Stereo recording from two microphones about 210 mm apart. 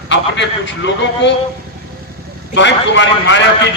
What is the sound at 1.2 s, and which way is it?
Speech, 55° left (ahead or behind).